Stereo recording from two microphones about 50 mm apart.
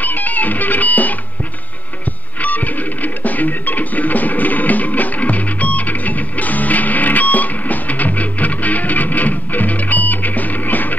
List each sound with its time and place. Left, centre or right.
0.0 s music: left
2.4 s music: left